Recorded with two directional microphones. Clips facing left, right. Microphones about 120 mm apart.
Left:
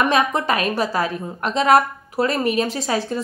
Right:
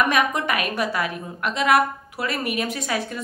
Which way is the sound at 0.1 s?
30° left (ahead or behind).